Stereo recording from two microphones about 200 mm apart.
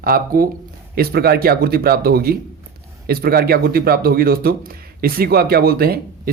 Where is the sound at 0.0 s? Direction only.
45° right (ahead or behind).